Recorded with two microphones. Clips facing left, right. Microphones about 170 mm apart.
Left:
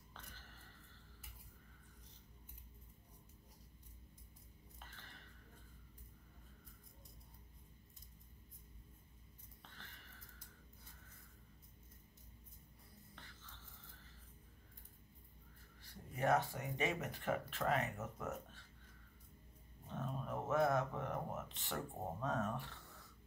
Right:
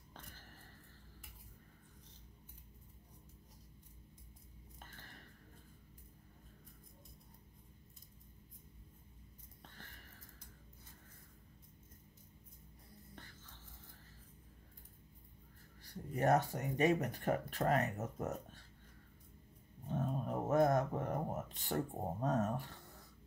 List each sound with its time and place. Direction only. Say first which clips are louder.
15.8 s speech: right 4 dB; 40° right (ahead or behind)
19.9 s a sound: right 6 dB; 40° right (ahead or behind)
22.2 s speech: right 5 dB; 40° right (ahead or behind)